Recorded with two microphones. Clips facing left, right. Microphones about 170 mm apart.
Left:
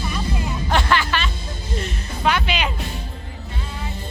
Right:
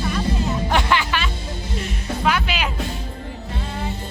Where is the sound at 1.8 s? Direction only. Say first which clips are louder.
Right 1 dB; centre (ahead or behind).